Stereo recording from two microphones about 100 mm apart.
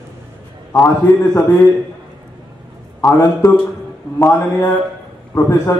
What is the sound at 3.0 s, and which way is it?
A man's voice, 30° left (ahead or behind).